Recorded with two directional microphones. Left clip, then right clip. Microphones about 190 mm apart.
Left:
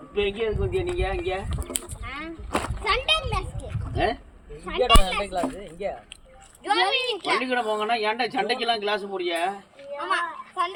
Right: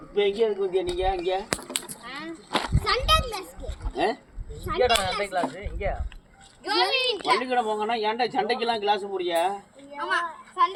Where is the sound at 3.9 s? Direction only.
15° left (ahead or behind).